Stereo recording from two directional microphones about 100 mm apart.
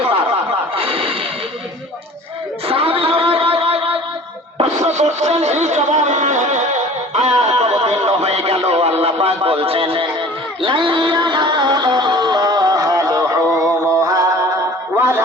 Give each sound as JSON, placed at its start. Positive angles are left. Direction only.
{"t": 0.8, "sound": "music", "side_deg": -65}
{"t": 2.6, "sound": "music", "side_deg": -70}
{"t": 4.5, "sound": "speech", "side_deg": -90}
{"t": 7.1, "sound": "a sound", "side_deg": -90}
{"t": 10.6, "sound": "music", "side_deg": -55}